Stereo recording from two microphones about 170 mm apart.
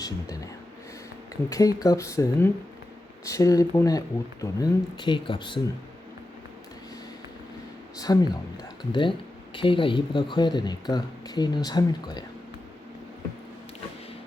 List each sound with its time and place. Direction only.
1.5 s speech: 20° left (ahead or behind)
7.9 s speech: 20° left (ahead or behind)